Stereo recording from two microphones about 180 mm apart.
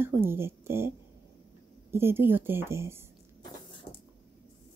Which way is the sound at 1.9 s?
15° right (ahead or behind).